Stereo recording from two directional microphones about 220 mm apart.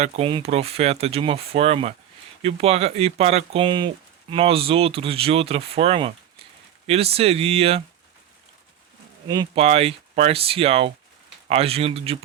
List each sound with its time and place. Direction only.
0.0 s speech: 25° right (ahead or behind)
9.2 s speech: 20° right (ahead or behind)